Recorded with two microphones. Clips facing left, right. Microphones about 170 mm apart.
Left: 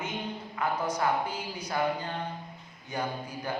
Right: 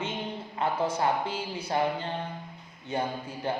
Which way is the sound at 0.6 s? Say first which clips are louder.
Right 2 dB; 25° right (ahead or behind).